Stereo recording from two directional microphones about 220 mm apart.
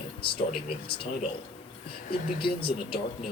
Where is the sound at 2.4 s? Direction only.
25° left (ahead or behind).